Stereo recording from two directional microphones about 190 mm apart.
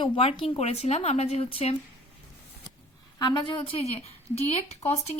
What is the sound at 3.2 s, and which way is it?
Speech, 25° left (ahead or behind).